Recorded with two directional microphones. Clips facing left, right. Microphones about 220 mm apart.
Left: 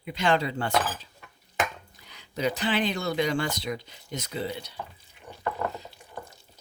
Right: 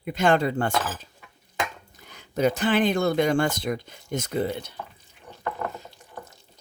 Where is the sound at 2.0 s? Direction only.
50° right (ahead or behind).